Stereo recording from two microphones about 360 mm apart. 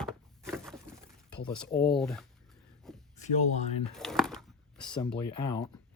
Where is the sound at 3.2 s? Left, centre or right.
Centre.